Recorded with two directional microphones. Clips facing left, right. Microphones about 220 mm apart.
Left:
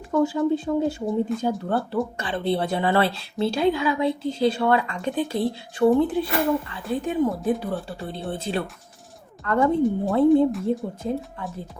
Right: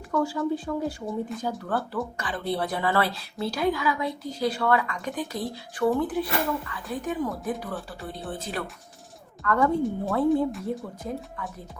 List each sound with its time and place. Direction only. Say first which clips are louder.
0.1 s speech: left 5 dB; 25° left (ahead or behind)